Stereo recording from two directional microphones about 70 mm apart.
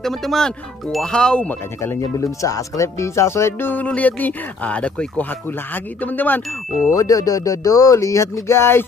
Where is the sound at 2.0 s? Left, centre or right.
Left.